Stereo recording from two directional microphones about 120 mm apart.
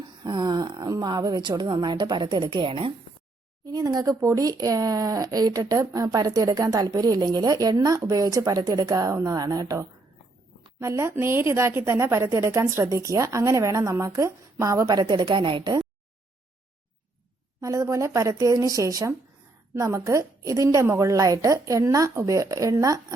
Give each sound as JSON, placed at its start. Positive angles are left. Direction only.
{"t": 0.0, "sound": "speech", "side_deg": -40}
{"t": 3.7, "sound": "a woman's voice", "side_deg": -35}
{"t": 17.6, "sound": "a woman's voice", "side_deg": -25}